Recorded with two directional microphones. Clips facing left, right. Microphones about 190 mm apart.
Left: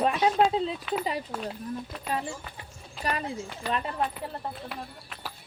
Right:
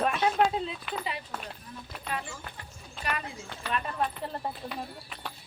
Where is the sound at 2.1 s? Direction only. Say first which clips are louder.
Left 5 dB; 35° left (ahead or behind).